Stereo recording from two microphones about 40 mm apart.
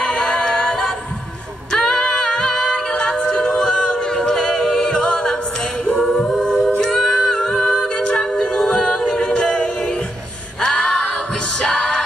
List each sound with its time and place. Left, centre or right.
0.0 s music: centre
2.9 s a capella: left
5.9 s a capella: left
6.8 s female singing: centre
7.9 s a capella: left
8.2 s a capella: centre
10.6 s music: centre